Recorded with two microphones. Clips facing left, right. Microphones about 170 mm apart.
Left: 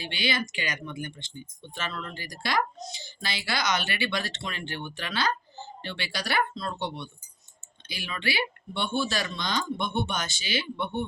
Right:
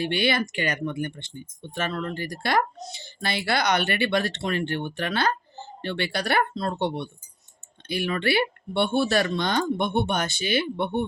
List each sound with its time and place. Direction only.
0.0 s speech: 60° right (ahead or behind)